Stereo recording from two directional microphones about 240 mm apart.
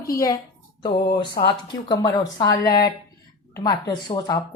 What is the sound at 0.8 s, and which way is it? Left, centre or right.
A woman's voice, centre.